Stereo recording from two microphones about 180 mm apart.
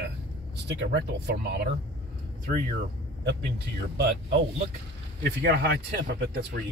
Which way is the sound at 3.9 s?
65° right (ahead or behind).